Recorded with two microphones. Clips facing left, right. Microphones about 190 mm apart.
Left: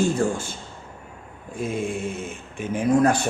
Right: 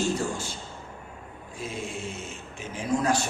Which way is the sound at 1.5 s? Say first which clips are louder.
Left 8 dB; 55° left (ahead or behind).